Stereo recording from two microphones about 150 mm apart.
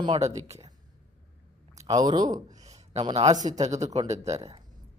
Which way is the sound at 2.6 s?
45° right (ahead or behind).